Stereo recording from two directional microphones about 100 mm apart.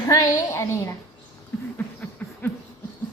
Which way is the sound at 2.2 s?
15° left (ahead or behind).